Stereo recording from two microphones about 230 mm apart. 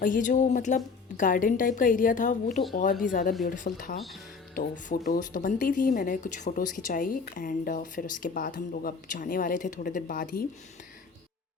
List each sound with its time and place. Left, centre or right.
0.0 s speech: left